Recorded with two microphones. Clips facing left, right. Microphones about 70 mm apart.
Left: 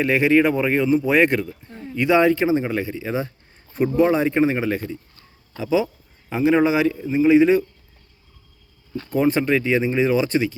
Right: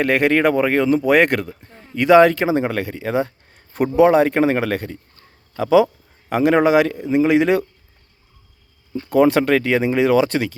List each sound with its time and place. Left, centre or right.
0.0 s speech: right
2.0 s a man's voice: right
9.0 s speech: right